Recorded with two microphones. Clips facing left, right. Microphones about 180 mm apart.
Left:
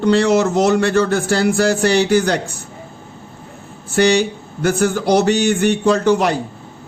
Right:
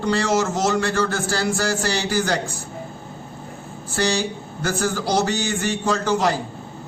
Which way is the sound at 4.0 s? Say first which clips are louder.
Left 8 dB; 60° left (ahead or behind).